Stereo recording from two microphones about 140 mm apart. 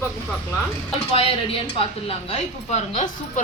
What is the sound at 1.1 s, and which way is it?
A woman's voice, 45° left (ahead or behind).